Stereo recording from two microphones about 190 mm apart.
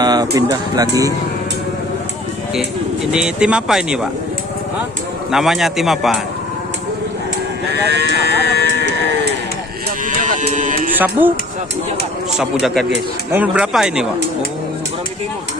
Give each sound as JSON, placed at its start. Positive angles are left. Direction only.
{"t": 0.0, "sound": "speech", "side_deg": -20}
{"t": 3.1, "sound": "speech", "side_deg": -5}
{"t": 5.3, "sound": "speech", "side_deg": 0}
{"t": 7.7, "sound": "speech", "side_deg": -65}
{"t": 10.1, "sound": "speech", "side_deg": -40}
{"t": 10.9, "sound": "speech", "side_deg": -10}
{"t": 12.6, "sound": "speech", "side_deg": 0}